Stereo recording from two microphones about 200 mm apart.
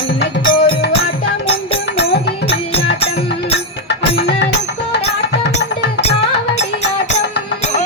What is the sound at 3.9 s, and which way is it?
Music, 55° left (ahead or behind).